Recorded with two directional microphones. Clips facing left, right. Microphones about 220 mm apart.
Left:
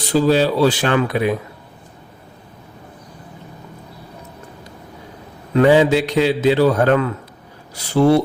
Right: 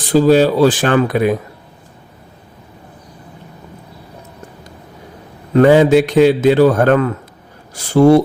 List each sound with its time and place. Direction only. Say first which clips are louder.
0.1 s a man's voice: right 5 dB; 45° right (ahead or behind)
5.5 s a man's voice: right 4 dB; 50° right (ahead or behind)